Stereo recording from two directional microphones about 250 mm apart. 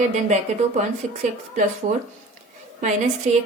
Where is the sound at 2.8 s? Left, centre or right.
Right.